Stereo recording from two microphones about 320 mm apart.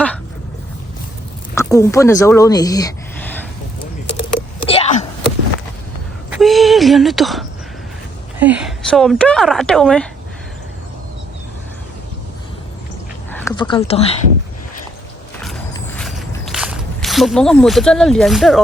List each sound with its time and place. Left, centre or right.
1.5 s speech: centre
4.7 s wail: centre
6.3 s a sound: centre
8.4 s speech: centre
13.3 s speech: centre
15.7 s walk: centre